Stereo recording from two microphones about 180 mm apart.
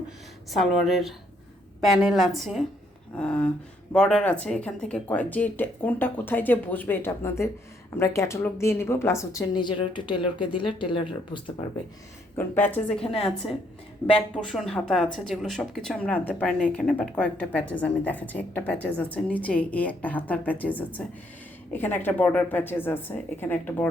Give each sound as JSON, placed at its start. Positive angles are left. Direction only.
{"t": 0.5, "sound": "speech", "side_deg": 0}
{"t": 12.4, "sound": "speech", "side_deg": 10}